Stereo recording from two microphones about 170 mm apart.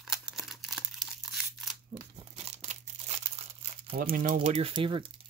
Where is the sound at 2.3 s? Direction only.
40° right (ahead or behind).